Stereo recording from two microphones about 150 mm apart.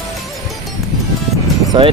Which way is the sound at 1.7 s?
35° right (ahead or behind).